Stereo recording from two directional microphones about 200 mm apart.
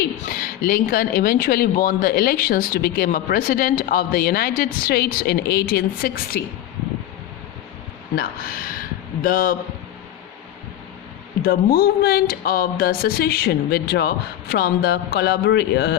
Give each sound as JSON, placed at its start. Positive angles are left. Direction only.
{"t": 0.2, "sound": "speech", "side_deg": 45}
{"t": 8.1, "sound": "speech", "side_deg": 45}
{"t": 11.4, "sound": "speech", "side_deg": 50}